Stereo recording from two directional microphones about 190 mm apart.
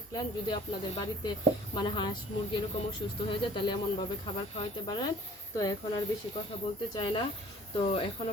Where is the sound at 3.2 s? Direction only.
25° left (ahead or behind).